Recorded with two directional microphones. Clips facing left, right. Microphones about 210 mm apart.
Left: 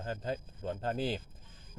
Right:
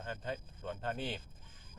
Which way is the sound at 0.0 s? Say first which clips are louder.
Left 5 dB; 35° left (ahead or behind).